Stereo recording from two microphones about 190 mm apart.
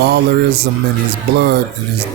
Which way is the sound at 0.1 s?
60° right (ahead or behind).